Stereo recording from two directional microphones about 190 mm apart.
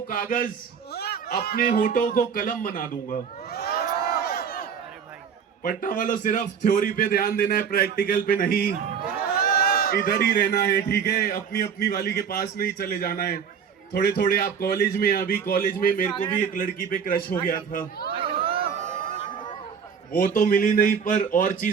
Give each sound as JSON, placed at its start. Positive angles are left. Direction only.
{"t": 0.1, "sound": "a man's voice", "side_deg": 45}
{"t": 0.9, "sound": "speech", "side_deg": 60}
{"t": 4.1, "sound": "a sound", "side_deg": 55}
{"t": 5.6, "sound": "a man's voice", "side_deg": 45}
{"t": 18.1, "sound": "a sound", "side_deg": -30}
{"t": 20.1, "sound": "a man's voice", "side_deg": 45}